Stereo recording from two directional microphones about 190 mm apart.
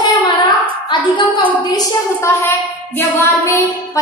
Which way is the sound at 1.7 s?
15° left (ahead or behind).